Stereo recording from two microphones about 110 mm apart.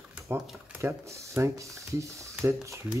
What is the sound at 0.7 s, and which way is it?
Speech, 25° right (ahead or behind).